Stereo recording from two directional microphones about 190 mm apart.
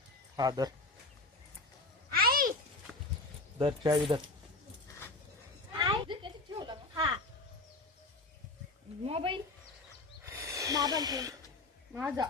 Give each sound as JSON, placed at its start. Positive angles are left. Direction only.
{"t": 0.3, "sound": "speech", "side_deg": -20}
{"t": 2.1, "sound": "a sound", "side_deg": -50}
{"t": 3.6, "sound": "speech", "side_deg": -25}
{"t": 5.8, "sound": "a sound", "side_deg": -25}
{"t": 9.0, "sound": "speech", "side_deg": -30}
{"t": 10.2, "sound": "snake", "side_deg": -15}
{"t": 11.9, "sound": "speech", "side_deg": -10}